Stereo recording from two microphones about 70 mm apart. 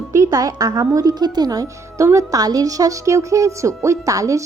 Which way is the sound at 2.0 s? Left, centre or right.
Right.